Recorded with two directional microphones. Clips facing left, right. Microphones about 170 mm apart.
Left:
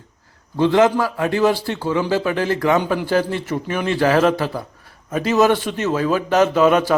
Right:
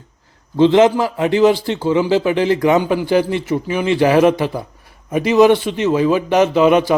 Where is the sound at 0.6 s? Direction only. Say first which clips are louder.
Right 4 dB; 20° right (ahead or behind).